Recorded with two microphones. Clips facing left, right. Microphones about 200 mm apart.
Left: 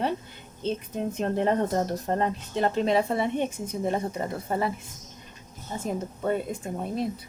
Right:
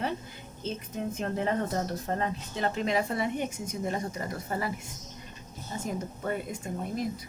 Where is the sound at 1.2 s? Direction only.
40° left (ahead or behind).